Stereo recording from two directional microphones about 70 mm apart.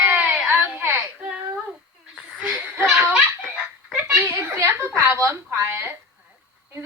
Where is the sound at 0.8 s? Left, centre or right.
Right.